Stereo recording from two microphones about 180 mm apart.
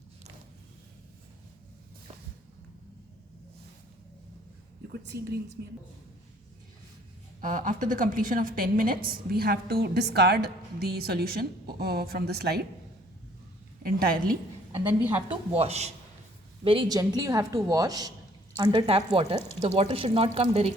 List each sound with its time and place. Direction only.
4.9 s a woman's voice: 65° right (ahead or behind)
7.4 s a woman's voice: 45° right (ahead or behind); by 12.6 s 60° right (ahead or behind)
13.8 s a woman's voice: 55° right (ahead or behind)
14.8 s a woman's voice: 10° right (ahead or behind)
15.3 s a woman's voice: 35° right (ahead or behind)